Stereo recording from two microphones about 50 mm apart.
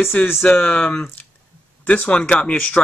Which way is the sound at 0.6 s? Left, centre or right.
Left.